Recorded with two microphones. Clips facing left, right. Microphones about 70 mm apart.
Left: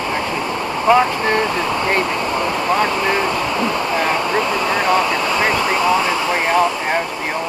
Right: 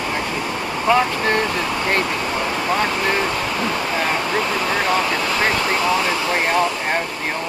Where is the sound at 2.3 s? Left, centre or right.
Centre.